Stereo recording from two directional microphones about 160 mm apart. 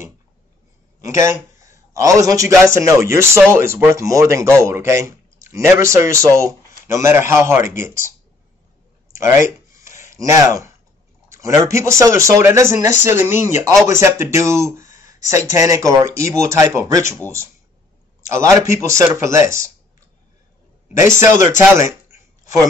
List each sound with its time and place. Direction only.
1.0 s a man's voice: 20° right (ahead or behind)
9.1 s a sound: 15° right (ahead or behind)
11.3 s speech: 20° right (ahead or behind)
13.3 s speech: 50° left (ahead or behind)
13.8 s speech: 15° right (ahead or behind)
18.3 s speech: 20° right (ahead or behind)
21.0 s speech: 20° right (ahead or behind)
21.5 s a sound: 15° right (ahead or behind)